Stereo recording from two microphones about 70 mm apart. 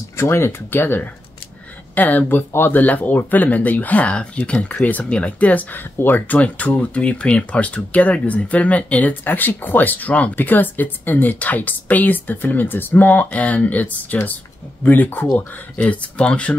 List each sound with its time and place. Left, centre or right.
0.2 s speech: left
15.9 s speech: centre